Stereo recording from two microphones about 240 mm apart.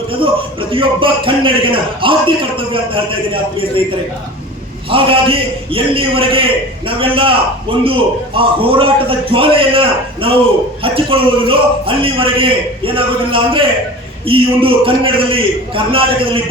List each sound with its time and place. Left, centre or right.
0.1 s a man's voice: right
4.9 s a man's voice: right